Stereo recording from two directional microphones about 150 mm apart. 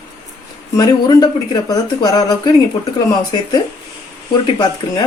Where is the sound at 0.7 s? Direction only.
25° left (ahead or behind).